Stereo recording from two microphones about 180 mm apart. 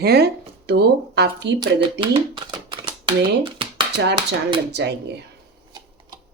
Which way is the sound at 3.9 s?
70° right (ahead or behind).